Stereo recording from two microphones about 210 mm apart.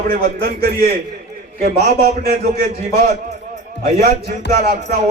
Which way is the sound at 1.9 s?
35° right (ahead or behind).